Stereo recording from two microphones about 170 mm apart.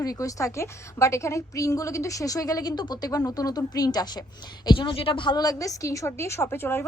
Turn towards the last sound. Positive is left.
turn(degrees=15)  # may be behind; listen again after turning